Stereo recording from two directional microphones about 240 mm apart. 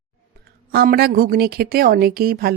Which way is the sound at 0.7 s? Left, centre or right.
Right.